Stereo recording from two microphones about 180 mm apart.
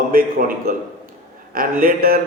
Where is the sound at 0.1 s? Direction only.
50° right (ahead or behind).